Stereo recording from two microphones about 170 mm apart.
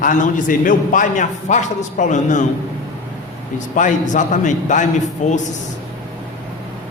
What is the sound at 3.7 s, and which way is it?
A man's voice, 50° left (ahead or behind).